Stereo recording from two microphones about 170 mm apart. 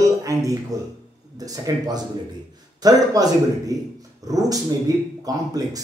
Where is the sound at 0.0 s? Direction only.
20° right (ahead or behind).